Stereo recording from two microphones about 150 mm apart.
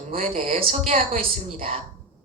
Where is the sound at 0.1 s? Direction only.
40° right (ahead or behind).